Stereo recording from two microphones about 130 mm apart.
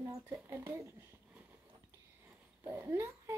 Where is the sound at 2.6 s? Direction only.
20° right (ahead or behind).